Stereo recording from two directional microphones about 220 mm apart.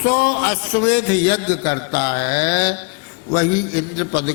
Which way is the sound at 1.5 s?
15° left (ahead or behind).